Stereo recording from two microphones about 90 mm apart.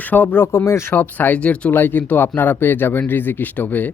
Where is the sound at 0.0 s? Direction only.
20° left (ahead or behind).